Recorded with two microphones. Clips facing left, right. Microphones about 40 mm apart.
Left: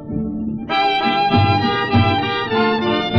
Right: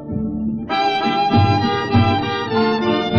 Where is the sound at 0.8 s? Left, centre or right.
Centre.